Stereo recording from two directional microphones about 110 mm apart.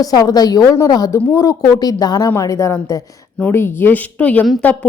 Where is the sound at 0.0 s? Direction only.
35° left (ahead or behind).